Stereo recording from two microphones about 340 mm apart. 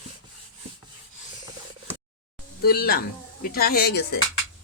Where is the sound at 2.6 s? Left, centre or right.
Left.